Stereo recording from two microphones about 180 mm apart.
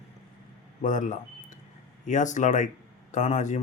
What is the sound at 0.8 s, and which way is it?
Speech, 45° left (ahead or behind).